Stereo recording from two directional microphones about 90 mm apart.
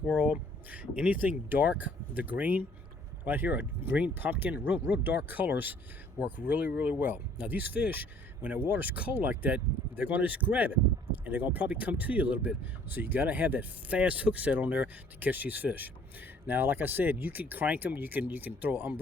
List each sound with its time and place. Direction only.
0.1 s speech: 20° right (ahead or behind)